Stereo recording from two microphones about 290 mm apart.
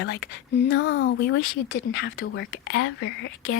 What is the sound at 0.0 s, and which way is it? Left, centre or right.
Speech, left.